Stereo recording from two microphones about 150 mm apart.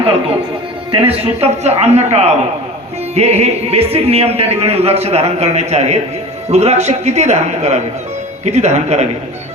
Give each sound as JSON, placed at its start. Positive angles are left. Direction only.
{"t": 1.0, "sound": "speech", "side_deg": -40}